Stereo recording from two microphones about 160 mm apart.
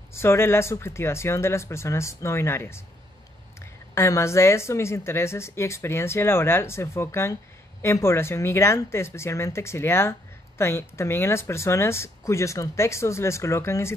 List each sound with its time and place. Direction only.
0.1 s speech: 15° left (ahead or behind)
3.9 s speech: 15° left (ahead or behind)